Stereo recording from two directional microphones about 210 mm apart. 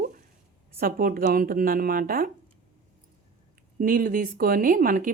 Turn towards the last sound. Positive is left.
turn(degrees=-40)  # may be behind; listen again after turning